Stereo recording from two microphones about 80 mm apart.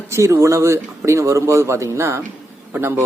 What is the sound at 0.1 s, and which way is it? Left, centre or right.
Speech, right.